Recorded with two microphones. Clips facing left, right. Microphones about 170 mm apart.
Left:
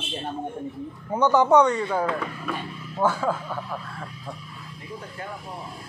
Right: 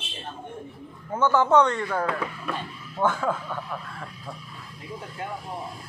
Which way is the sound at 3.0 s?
5° left (ahead or behind).